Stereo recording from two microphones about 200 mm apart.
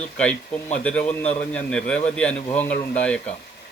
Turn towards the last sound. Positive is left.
turn(degrees=5)  # may be behind; listen again after turning